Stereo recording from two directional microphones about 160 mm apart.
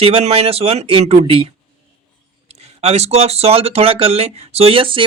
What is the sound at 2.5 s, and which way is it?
Speech, 40° right (ahead or behind).